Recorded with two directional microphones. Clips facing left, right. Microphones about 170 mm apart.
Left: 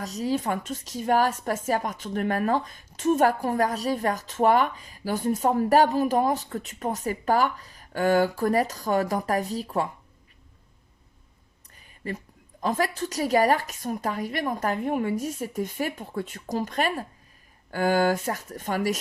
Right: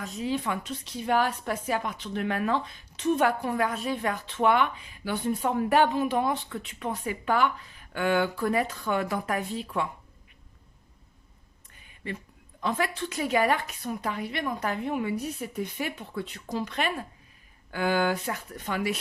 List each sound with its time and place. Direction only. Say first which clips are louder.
0.0 s a woman's voice: left 3 dB; 40° left (ahead or behind)
12.0 s a woman's voice: left 3 dB; 40° left (ahead or behind)